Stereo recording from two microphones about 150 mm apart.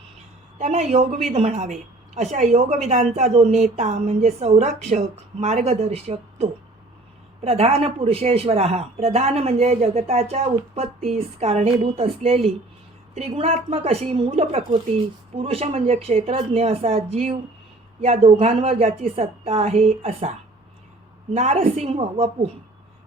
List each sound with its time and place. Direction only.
0.6 s a woman's voice: 50° right (ahead or behind)
21.3 s a woman's voice: 45° right (ahead or behind)